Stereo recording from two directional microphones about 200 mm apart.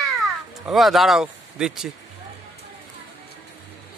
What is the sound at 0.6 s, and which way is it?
Speech, centre (ahead or behind).